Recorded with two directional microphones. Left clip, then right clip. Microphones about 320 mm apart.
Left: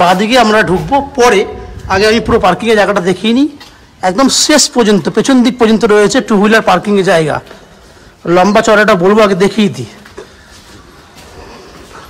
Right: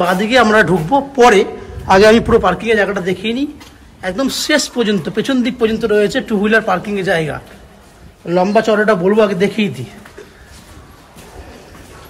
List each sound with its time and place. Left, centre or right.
0.0 s a man's voice: centre